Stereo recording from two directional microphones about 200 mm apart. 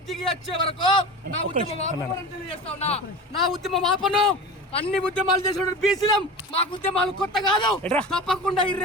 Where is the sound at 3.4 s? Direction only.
Centre (ahead or behind).